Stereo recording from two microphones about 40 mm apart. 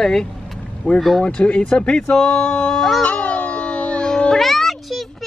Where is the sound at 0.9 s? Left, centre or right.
Left.